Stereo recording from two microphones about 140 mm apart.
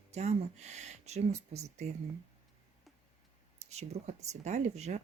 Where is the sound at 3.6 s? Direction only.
55° right (ahead or behind).